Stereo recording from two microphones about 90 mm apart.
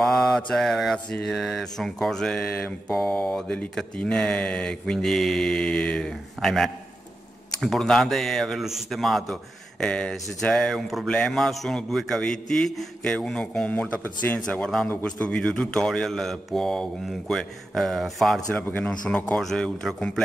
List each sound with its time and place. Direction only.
0.0 s mantra: 5° left (ahead or behind)
0.4 s a man's voice: 5° left (ahead or behind)
0.9 s speech: 10° left (ahead or behind)
1.3 s a man's voice: centre (ahead or behind)
18.5 s a man's voice: 20° left (ahead or behind); by 20.1 s 5° left (ahead or behind)